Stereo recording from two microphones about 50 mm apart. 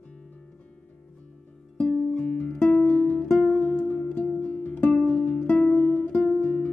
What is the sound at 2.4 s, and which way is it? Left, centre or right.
Music, left.